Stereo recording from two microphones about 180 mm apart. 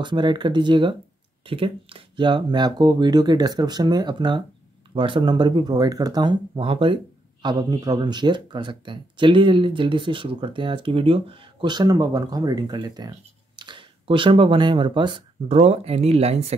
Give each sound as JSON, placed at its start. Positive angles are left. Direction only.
{"t": 0.0, "sound": "speech", "side_deg": -25}